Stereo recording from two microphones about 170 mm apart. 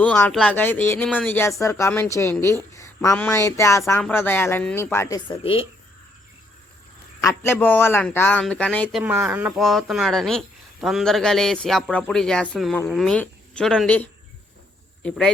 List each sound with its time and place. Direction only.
0.0 s speech: 5° left (ahead or behind)
5.4 s speech: 35° left (ahead or behind)
7.2 s speech: 15° left (ahead or behind)